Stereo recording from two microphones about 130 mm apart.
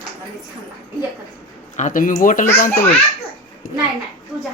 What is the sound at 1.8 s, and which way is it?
Speech, 90° left.